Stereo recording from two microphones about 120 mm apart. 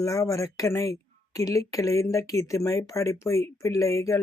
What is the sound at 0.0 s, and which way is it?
Speech, 25° left (ahead or behind).